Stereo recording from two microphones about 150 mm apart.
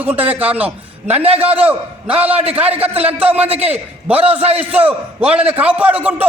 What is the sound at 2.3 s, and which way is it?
Speech, 40° right (ahead or behind).